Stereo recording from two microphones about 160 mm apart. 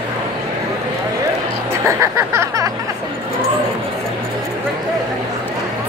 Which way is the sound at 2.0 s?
20° right (ahead or behind).